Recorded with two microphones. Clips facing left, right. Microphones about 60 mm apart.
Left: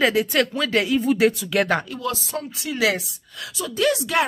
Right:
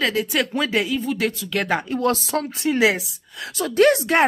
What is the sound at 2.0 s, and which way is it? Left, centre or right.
Speech, right.